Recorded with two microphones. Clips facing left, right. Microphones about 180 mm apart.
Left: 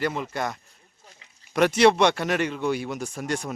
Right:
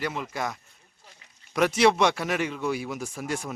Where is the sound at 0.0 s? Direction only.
Centre (ahead or behind).